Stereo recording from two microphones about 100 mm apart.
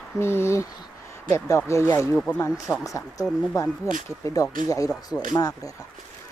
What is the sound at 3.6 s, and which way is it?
Speech, 35° left (ahead or behind).